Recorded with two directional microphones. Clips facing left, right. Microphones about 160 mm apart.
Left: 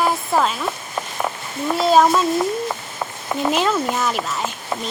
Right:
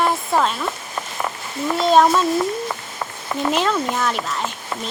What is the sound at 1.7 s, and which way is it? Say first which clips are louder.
Speech: even; 5° left (ahead or behind).